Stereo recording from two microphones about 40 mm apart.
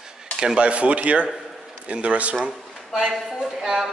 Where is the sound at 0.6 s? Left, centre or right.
Right.